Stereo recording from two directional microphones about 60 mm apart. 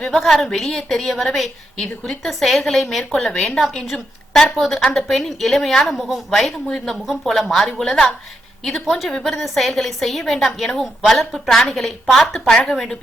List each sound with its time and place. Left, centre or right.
0.0 s a woman's voice: centre
3.0 s a woman's voice: centre
4.5 s a woman's voice: centre
6.7 s a woman's voice: centre